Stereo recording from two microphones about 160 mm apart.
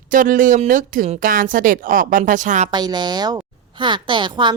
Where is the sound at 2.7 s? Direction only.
25° right (ahead or behind).